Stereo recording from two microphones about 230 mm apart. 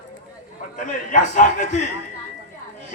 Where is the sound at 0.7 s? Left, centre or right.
Left.